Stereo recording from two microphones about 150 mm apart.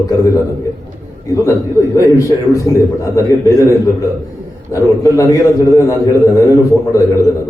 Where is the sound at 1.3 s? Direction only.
20° left (ahead or behind).